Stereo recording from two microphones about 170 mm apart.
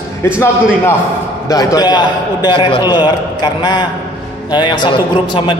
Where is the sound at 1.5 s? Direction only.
20° left (ahead or behind).